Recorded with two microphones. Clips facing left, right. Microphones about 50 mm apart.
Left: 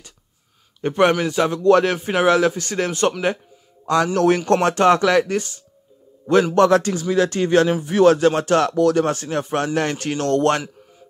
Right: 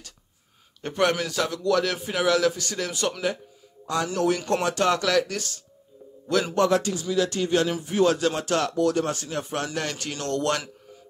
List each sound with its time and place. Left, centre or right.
0.7 s a man's voice: left
1.7 s a man's voice: left
3.8 s a man's voice: left
4.7 s a man's voice: left
6.5 s a man's voice: left
8.7 s a man's voice: left
9.1 s a man's voice: left